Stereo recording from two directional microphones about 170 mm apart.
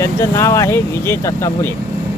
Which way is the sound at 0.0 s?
20° left (ahead or behind).